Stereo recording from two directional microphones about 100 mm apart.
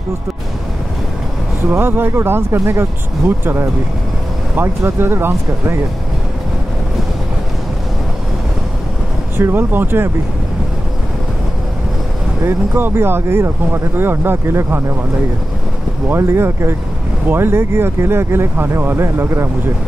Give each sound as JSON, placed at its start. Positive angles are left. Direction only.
{"t": 1.7, "sound": "speech", "side_deg": -20}
{"t": 9.4, "sound": "speech", "side_deg": -20}
{"t": 12.4, "sound": "speech", "side_deg": -20}
{"t": 16.1, "sound": "speech", "side_deg": -25}